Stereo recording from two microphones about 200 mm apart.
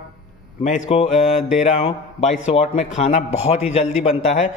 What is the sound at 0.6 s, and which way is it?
A man's voice, 35° left (ahead or behind).